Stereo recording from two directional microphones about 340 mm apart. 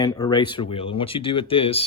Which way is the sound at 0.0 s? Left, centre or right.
Centre.